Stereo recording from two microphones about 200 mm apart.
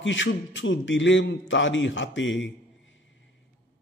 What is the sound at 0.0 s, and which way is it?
A man's voice, 65° left (ahead or behind).